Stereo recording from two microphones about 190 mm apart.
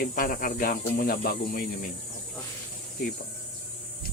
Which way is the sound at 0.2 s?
50° left (ahead or behind).